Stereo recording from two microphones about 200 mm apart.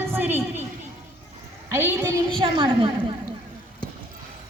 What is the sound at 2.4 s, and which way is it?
Speech, 25° right (ahead or behind).